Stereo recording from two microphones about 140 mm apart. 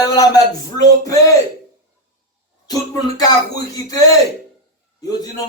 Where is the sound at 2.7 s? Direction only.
25° left (ahead or behind).